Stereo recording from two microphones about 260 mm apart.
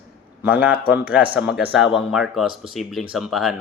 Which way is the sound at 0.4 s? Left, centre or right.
Centre.